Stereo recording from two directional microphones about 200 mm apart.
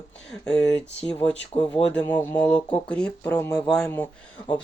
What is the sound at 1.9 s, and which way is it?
Speech, 10° left (ahead or behind).